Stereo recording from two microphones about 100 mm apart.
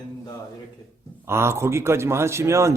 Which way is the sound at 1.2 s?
25° right (ahead or behind).